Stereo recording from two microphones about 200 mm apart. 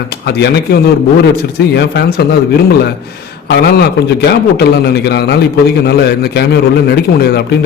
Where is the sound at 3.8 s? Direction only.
55° left (ahead or behind).